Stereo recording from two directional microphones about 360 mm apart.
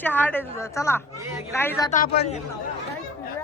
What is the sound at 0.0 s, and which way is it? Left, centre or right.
Speech, centre.